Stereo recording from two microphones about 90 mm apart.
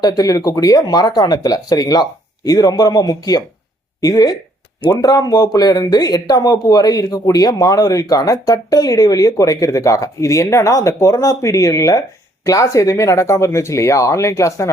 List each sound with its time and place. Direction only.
0.0 s speech: 45° left (ahead or behind)